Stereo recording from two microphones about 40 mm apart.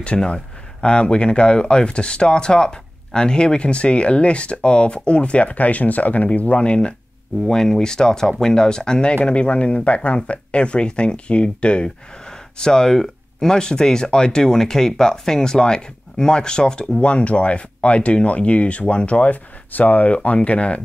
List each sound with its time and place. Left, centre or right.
0.1 s speech: centre
7.4 s speech: centre
17.0 s speech: left